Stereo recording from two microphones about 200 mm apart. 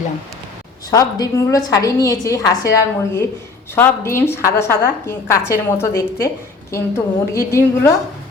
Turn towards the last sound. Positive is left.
turn(degrees=15)  # may be behind; listen again after turning